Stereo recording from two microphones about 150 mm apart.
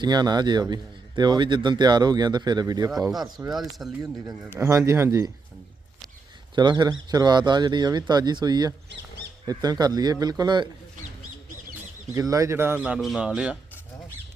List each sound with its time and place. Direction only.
0.0 s speech: 30° right (ahead or behind)
3.8 s speech: 5° right (ahead or behind)
4.5 s speech: 20° right (ahead or behind)
6.6 s speech: 25° right (ahead or behind)
12.1 s speech: 20° right (ahead or behind); by 13.6 s 5° right (ahead or behind)